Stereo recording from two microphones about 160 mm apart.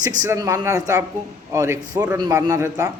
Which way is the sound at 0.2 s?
20° right (ahead or behind).